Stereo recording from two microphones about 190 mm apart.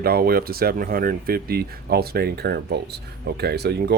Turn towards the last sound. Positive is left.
turn(degrees=-60)  # may be behind; listen again after turning